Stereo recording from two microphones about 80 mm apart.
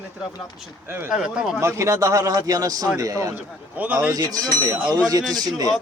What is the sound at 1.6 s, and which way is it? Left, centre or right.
A man's voice, right.